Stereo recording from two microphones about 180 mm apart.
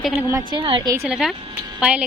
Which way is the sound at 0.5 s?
25° right (ahead or behind).